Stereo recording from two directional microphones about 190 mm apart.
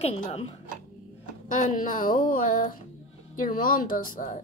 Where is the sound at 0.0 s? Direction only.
35° left (ahead or behind).